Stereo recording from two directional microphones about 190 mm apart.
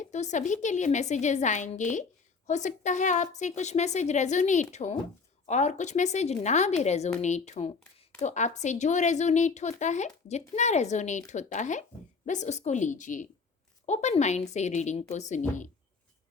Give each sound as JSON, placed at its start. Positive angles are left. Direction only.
{"t": 0.0, "sound": "a woman's voice", "side_deg": 40}